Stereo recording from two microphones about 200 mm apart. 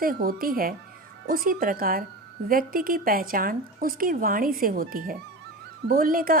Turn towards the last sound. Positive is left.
turn(degrees=-45)  # may be behind; listen again after turning